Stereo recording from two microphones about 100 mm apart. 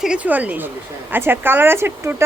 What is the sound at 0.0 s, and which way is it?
A woman's voice, 10° right (ahead or behind).